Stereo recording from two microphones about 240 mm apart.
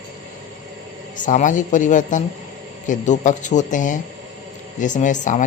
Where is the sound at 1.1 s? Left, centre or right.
Left.